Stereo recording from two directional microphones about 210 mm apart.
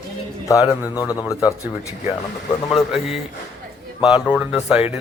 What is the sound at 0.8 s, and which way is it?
Speech, 15° left (ahead or behind).